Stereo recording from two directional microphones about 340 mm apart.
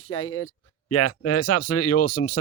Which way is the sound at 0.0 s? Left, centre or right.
Left.